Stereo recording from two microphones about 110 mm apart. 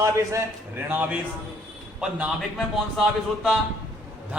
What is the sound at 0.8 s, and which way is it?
Speech, 15° right (ahead or behind).